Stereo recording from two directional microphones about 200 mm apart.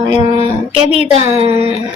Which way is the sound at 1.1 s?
30° right (ahead or behind).